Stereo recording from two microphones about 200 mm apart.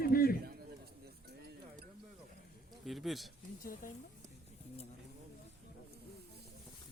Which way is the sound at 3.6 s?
45° left (ahead or behind).